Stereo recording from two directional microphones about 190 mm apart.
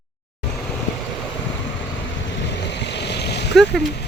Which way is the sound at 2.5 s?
65° left (ahead or behind).